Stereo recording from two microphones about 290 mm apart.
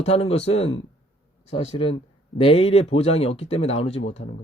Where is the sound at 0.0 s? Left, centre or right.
Centre.